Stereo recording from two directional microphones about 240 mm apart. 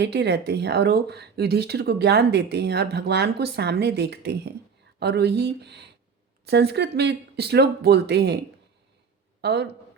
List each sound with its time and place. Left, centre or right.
0.0 s speech: right
9.4 s speech: right